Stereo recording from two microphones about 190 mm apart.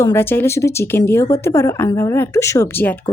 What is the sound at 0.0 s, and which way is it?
Speech, 10° left (ahead or behind).